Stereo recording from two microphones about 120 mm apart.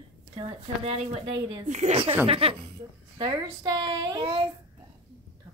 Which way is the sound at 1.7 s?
70° right (ahead or behind).